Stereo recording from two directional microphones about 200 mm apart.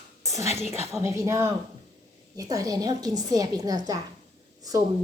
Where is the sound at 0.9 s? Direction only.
15° right (ahead or behind).